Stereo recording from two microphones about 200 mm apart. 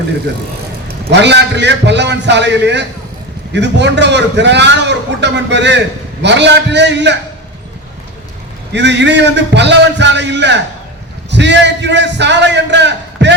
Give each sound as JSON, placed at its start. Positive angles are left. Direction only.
{"t": 0.9, "sound": "a man's voice", "side_deg": -60}
{"t": 8.7, "sound": "a man's voice", "side_deg": -60}